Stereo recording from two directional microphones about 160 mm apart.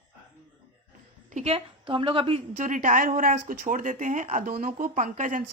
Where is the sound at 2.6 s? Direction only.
55° right (ahead or behind).